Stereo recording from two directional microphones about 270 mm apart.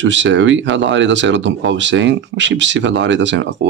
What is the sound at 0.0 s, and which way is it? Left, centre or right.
Speech, right.